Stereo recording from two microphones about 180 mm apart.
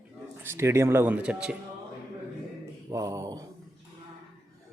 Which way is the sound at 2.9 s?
20° right (ahead or behind).